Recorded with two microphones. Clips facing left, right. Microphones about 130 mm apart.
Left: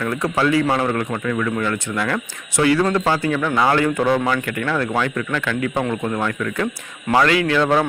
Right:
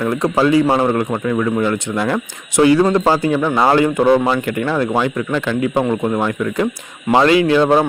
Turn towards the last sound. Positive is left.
turn(degrees=-25)  # may be behind; listen again after turning